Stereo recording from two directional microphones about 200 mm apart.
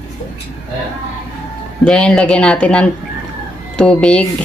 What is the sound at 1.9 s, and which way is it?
Speech, 5° left (ahead or behind).